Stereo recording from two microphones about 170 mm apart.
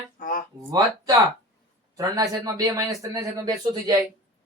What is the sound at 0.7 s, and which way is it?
A man's voice, 20° right (ahead or behind).